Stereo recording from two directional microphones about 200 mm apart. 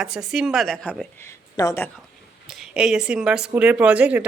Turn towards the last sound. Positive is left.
turn(degrees=-5)  # may be behind; listen again after turning